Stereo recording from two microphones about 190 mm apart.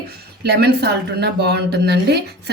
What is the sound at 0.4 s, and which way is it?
Speech, 60° right (ahead or behind).